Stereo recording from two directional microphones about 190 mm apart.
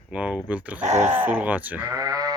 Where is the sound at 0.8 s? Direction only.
35° right (ahead or behind).